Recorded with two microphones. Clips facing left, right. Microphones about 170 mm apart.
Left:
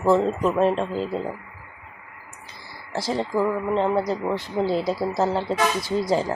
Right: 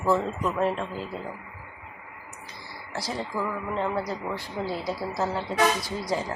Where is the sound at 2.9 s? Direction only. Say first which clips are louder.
Left 7 dB; 25° left (ahead or behind).